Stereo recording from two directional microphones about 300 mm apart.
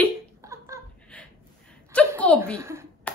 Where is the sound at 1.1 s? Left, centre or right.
Centre.